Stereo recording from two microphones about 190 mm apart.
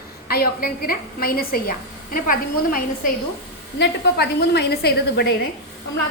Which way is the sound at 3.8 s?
60° left (ahead or behind).